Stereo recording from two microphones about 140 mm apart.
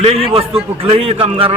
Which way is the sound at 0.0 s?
45° right (ahead or behind).